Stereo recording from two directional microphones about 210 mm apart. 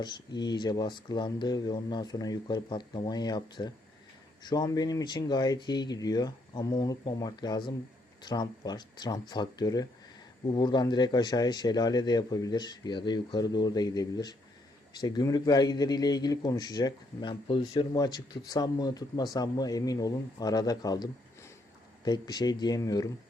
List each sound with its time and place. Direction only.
0.0 s speech: 20° left (ahead or behind)